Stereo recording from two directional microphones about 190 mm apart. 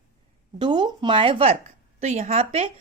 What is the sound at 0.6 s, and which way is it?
A woman's voice, 25° right (ahead or behind).